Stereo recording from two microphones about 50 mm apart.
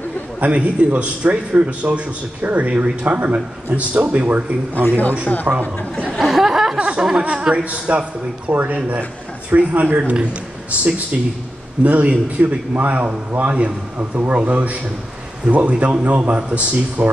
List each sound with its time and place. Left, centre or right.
0.4 s a man's voice: right
4.8 s speech: left
6.1 s chuckle: centre
6.8 s a sound: centre
7.3 s a man's voice: centre